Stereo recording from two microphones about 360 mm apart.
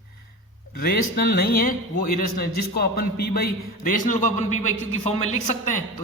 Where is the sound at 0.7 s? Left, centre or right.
Left.